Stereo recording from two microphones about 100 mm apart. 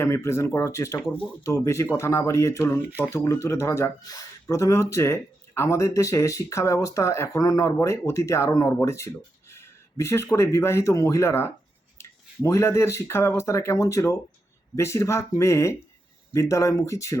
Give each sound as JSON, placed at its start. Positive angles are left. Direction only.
{"t": 0.0, "sound": "speech", "side_deg": 25}